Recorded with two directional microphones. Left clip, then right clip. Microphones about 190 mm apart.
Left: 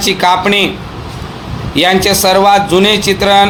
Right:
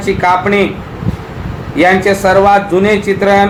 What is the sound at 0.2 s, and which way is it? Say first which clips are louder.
Speech: even; 40° left (ahead or behind).